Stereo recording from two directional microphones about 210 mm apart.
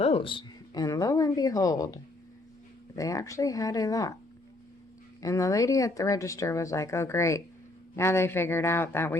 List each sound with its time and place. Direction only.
0.0 s speech: 25° left (ahead or behind)
5.2 s speech: 15° left (ahead or behind)